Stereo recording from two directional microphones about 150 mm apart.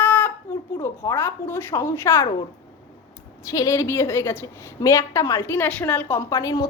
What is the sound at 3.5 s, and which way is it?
A woman's voice, 20° left (ahead or behind).